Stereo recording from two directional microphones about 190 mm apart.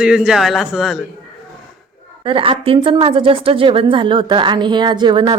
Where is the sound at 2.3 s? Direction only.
30° right (ahead or behind).